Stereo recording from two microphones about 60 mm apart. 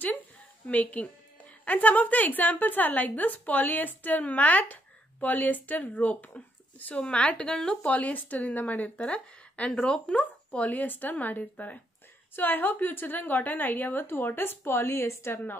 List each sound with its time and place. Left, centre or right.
0.7 s a woman's voice: left